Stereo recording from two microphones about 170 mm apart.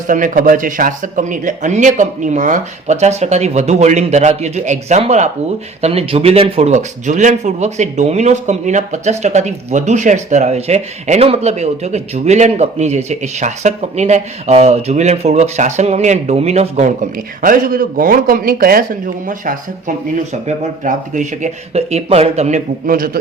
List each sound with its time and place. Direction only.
0.1 s speech: 50° right (ahead or behind)
20.8 s speech: 45° right (ahead or behind)